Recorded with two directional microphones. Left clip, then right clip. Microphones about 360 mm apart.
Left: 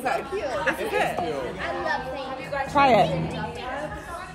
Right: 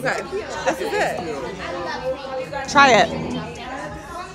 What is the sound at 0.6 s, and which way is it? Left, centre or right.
Speech, centre.